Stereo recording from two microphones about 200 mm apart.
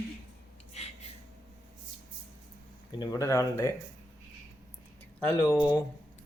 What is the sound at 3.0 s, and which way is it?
Speech, 15° left (ahead or behind).